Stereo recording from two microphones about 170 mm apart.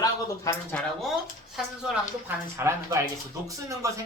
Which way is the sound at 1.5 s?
5° right (ahead or behind).